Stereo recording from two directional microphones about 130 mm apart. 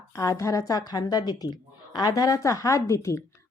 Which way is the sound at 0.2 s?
25° left (ahead or behind).